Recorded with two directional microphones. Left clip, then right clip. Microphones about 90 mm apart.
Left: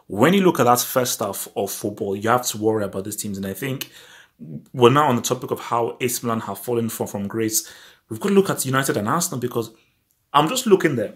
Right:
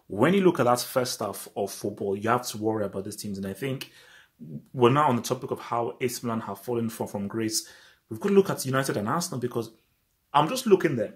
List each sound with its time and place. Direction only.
0.1 s speech: 15° left (ahead or behind)